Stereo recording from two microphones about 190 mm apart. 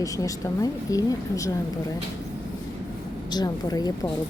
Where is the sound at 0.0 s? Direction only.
20° left (ahead or behind).